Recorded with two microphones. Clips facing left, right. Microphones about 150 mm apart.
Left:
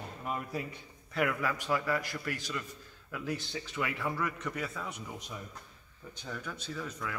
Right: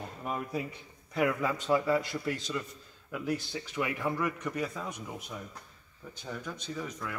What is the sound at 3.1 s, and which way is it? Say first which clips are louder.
A man's voice: right 3 dB; 10° right (ahead or behind).